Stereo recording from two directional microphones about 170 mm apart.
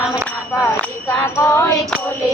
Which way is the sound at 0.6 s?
15° left (ahead or behind).